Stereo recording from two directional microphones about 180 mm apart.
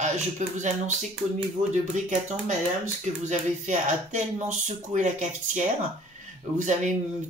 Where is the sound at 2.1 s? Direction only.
45° right (ahead or behind).